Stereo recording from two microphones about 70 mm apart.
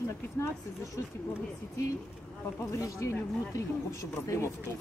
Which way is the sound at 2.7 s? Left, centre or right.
Left.